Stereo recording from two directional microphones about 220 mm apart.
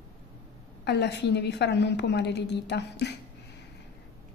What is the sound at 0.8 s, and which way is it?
A woman's voice, 50° left (ahead or behind).